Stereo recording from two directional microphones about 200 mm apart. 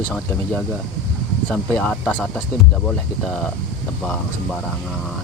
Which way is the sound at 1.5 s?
5° left (ahead or behind).